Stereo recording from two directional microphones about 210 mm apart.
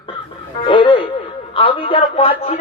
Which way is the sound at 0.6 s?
25° left (ahead or behind).